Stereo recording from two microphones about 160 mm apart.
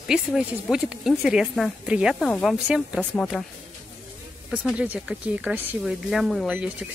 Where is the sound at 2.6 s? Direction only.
5° right (ahead or behind).